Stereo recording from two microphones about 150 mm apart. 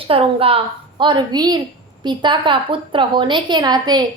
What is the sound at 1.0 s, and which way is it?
A woman's voice, 30° right (ahead or behind).